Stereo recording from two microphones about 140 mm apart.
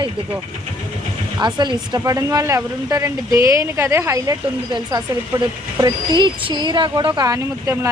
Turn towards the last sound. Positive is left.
turn(degrees=-20)  # may be behind; listen again after turning